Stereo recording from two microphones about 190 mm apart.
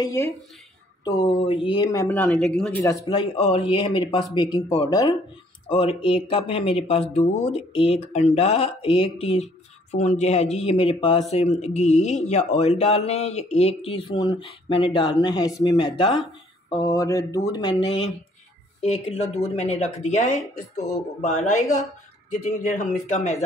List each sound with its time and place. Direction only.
0.0 s speech: 15° left (ahead or behind)
2.8 s speech: 15° left (ahead or behind)
3.3 s speech: 30° left (ahead or behind)